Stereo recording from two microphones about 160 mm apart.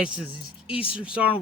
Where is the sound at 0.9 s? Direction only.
5° right (ahead or behind).